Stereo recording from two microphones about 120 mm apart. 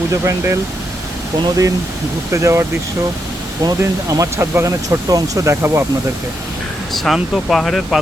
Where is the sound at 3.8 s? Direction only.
25° right (ahead or behind).